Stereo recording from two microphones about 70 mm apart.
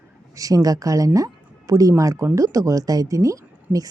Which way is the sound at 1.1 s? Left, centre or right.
Right.